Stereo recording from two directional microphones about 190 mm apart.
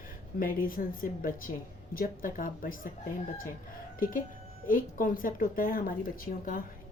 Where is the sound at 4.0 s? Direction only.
45° left (ahead or behind).